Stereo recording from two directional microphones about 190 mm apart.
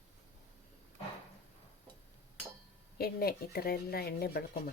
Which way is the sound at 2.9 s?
55° left (ahead or behind).